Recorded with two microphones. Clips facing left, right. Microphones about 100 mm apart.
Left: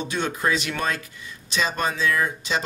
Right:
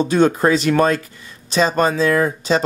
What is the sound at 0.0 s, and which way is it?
Speech, 40° right (ahead or behind).